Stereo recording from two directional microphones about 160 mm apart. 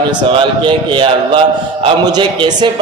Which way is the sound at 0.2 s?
30° right (ahead or behind).